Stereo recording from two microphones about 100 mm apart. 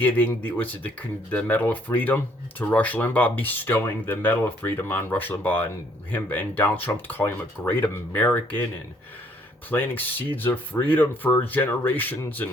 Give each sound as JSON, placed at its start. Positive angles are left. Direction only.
{"t": 0.0, "sound": "speech", "side_deg": 15}
{"t": 9.6, "sound": "speech", "side_deg": 20}